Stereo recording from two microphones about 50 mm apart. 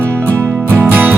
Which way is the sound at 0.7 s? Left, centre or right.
Right.